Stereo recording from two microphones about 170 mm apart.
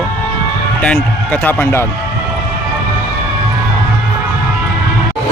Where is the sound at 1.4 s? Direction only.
15° left (ahead or behind).